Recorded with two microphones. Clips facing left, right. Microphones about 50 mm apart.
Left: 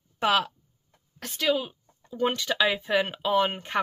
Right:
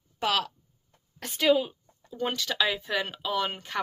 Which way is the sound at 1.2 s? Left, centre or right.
Centre.